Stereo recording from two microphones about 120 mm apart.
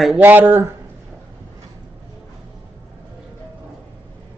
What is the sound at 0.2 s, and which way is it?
Speech, 15° right (ahead or behind).